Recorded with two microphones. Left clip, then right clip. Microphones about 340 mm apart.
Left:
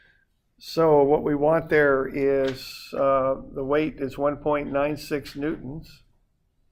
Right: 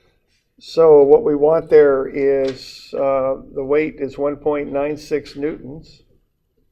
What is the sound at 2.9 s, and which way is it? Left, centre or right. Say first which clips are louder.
Speech: right 4 dB; left.